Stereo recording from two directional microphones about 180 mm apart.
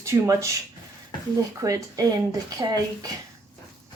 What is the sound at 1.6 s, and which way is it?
Speech, 20° right (ahead or behind).